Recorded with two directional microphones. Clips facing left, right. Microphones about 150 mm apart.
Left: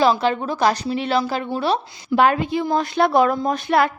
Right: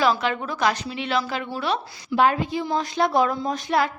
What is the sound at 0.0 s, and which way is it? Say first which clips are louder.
A woman's voice: left 4 dB; 30° left (ahead or behind).